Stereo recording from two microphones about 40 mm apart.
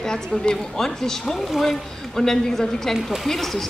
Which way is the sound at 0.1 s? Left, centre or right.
Centre.